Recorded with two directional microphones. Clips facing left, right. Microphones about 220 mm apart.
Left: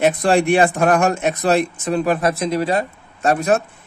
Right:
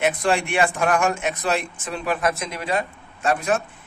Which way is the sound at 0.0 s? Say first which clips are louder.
Left 6 dB; 40° left (ahead or behind).